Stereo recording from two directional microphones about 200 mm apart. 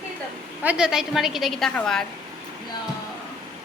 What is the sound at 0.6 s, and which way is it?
A woman's voice, 5° right (ahead or behind).